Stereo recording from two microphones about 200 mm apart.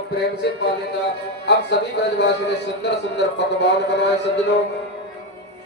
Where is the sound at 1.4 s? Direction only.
60° left (ahead or behind).